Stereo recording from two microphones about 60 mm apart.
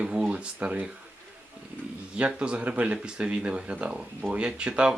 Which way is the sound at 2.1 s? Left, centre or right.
Centre.